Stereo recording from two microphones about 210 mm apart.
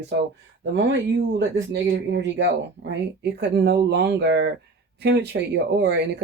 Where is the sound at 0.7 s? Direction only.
55° right (ahead or behind).